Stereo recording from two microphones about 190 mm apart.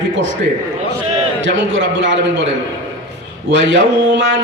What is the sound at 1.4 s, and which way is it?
Speech, 80° right.